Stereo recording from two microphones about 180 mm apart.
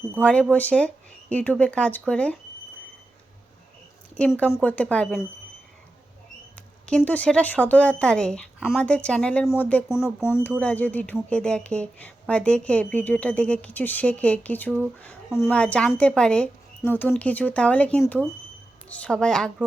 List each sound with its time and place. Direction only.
0.2 s speech: 5° left (ahead or behind)
4.1 s speech: 5° left (ahead or behind)
6.6 s a woman's voice: 5° left (ahead or behind)